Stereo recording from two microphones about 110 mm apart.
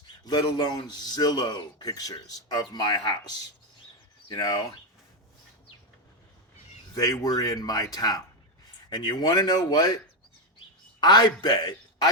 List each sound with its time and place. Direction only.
0.3 s a man's voice: 40° left (ahead or behind)
6.9 s a man's voice: 35° left (ahead or behind)
11.0 s a man's voice: 40° left (ahead or behind)